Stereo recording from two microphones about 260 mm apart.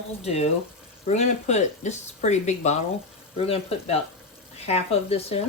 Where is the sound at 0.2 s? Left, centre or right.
Left.